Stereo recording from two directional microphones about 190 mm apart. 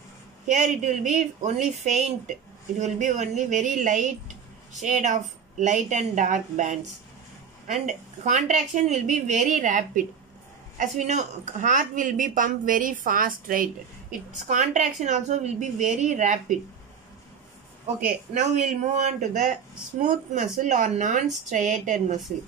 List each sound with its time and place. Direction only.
0.5 s a woman's voice: 40° right (ahead or behind)
18.3 s a woman's voice: 40° right (ahead or behind)